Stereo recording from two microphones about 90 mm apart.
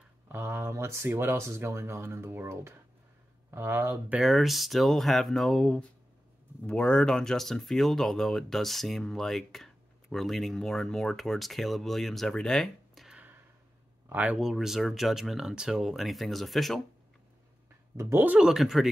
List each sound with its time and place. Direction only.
0.3 s speech: 25° right (ahead or behind)
4.2 s speech: centre (ahead or behind)
14.1 s speech: 20° right (ahead or behind)
14.4 s speech: 5° right (ahead or behind)
17.9 s speech: 20° right (ahead or behind)
18.4 s speech: 5° right (ahead or behind)